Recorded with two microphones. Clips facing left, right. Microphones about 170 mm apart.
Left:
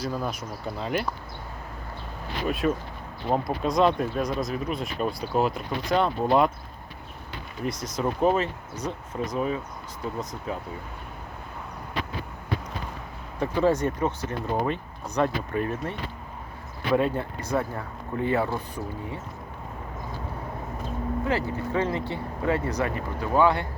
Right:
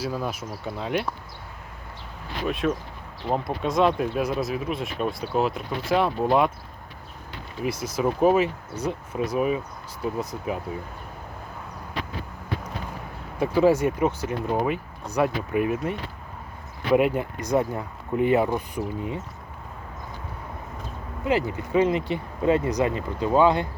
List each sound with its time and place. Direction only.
0.0 s speech: 5° right (ahead or behind)
2.5 s speech: centre (ahead or behind)
7.6 s speech: 5° right (ahead or behind)
13.4 s speech: 10° right (ahead or behind)
21.2 s speech: 15° right (ahead or behind)